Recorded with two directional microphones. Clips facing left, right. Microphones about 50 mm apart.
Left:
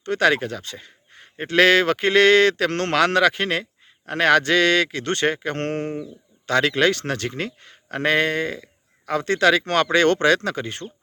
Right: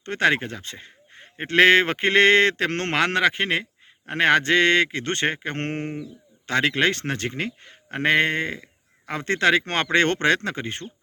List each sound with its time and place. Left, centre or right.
0.0 s a man's voice: right